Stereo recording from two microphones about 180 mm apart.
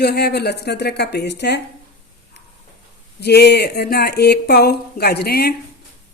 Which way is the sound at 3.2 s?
65° left (ahead or behind).